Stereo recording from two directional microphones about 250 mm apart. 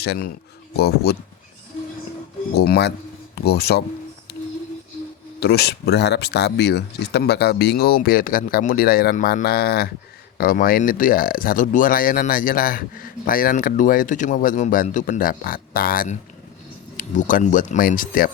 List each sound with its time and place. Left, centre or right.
0.0 s speech: left
2.6 s speech: left
5.4 s speech: left